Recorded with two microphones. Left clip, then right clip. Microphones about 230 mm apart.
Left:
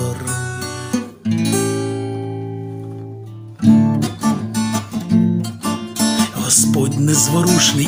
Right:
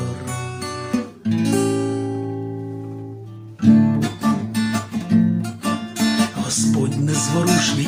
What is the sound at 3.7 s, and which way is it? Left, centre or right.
Music, left.